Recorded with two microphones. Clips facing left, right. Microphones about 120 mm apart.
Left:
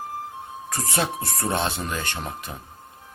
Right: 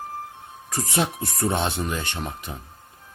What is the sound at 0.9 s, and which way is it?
Speech, 20° right (ahead or behind).